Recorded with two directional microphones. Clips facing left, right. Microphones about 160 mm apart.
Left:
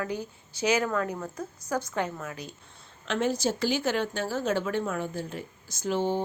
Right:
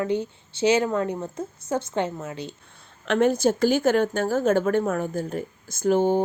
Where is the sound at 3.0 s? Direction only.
55° right (ahead or behind).